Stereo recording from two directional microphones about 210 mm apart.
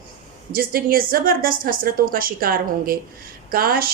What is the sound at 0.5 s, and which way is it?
Speech, 45° right (ahead or behind).